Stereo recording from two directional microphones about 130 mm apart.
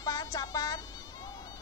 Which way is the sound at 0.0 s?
30° left (ahead or behind).